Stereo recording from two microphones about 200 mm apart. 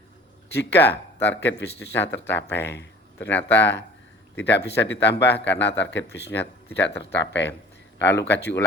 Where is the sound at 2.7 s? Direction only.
60° left (ahead or behind).